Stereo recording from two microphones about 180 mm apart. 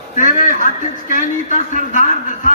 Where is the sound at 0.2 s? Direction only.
50° left (ahead or behind).